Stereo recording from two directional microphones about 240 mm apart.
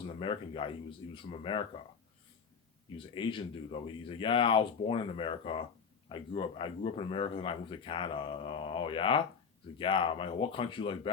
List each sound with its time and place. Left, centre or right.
0.2 s speech: left
3.2 s speech: left